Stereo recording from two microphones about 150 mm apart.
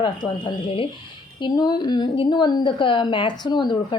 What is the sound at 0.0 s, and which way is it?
A woman's voice, 30° left (ahead or behind).